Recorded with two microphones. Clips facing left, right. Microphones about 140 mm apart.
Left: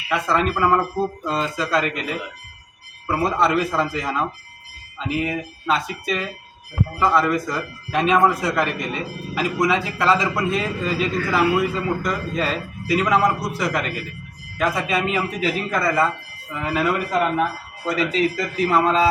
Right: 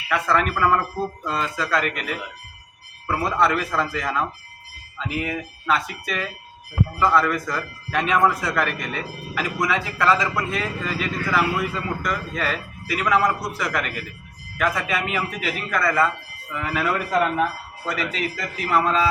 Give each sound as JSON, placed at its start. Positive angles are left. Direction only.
{"t": 0.1, "sound": "speech", "side_deg": 25}
{"t": 3.3, "sound": "speech", "side_deg": 25}